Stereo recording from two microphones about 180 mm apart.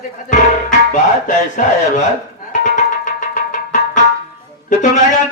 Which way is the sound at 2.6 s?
45° left (ahead or behind).